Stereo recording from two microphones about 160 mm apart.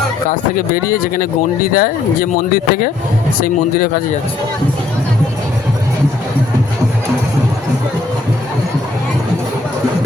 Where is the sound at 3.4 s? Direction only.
70° left (ahead or behind).